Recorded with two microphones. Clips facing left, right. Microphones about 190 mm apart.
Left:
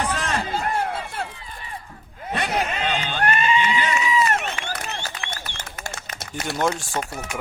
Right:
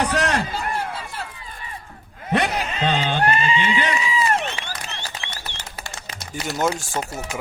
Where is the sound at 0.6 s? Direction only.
55° left (ahead or behind).